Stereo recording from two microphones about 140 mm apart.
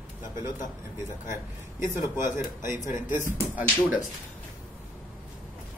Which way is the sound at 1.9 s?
20° right (ahead or behind).